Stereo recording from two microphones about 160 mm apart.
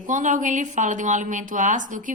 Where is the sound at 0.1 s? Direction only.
55° right (ahead or behind).